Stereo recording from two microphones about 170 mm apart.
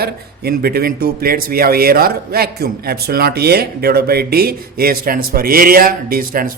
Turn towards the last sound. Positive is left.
turn(degrees=-55)  # may be behind; listen again after turning